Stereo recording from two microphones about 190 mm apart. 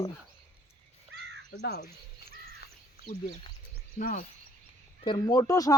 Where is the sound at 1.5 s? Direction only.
60° left (ahead or behind).